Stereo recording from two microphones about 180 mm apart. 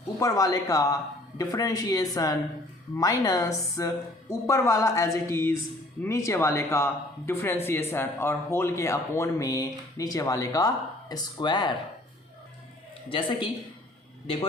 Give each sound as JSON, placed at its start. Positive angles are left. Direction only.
{"t": 0.2, "sound": "speech", "side_deg": 20}
{"t": 13.1, "sound": "speech", "side_deg": 30}